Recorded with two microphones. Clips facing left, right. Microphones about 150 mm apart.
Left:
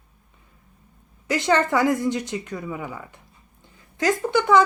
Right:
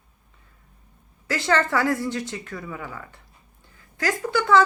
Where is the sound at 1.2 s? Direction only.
20° left (ahead or behind).